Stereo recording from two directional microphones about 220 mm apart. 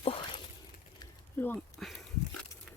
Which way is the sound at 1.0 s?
10° left (ahead or behind).